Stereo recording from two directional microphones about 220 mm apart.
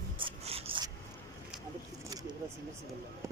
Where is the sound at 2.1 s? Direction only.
15° right (ahead or behind).